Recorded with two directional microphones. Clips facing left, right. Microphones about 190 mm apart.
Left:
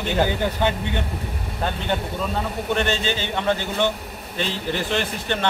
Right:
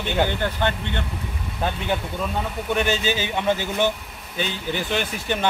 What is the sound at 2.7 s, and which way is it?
Speech, 5° right (ahead or behind).